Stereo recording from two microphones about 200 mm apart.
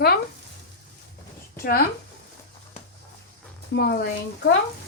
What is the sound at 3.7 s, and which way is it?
Speech, 55° left (ahead or behind).